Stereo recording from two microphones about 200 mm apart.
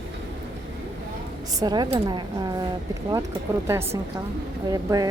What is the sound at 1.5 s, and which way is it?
A woman's voice, 20° right (ahead or behind).